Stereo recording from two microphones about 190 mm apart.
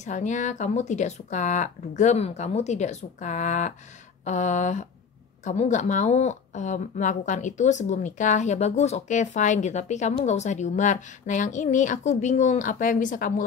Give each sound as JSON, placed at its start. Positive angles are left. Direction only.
{"t": 0.0, "sound": "a woman's voice", "side_deg": 40}